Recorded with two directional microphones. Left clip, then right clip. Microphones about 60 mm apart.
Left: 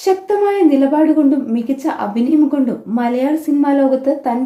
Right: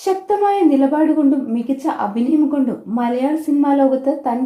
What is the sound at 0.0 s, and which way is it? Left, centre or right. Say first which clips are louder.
A woman's voice: left 2 dB; right.